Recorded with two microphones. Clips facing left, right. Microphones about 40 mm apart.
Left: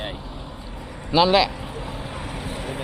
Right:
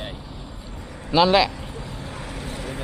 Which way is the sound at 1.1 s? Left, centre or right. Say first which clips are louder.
Even; centre.